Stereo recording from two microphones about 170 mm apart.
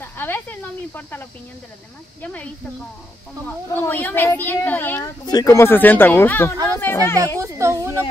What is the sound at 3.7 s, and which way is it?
Speech, 10° left (ahead or behind).